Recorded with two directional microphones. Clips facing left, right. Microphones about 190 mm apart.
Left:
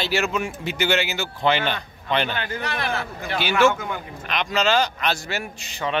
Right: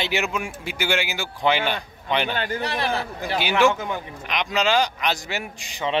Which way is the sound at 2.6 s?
35° right (ahead or behind).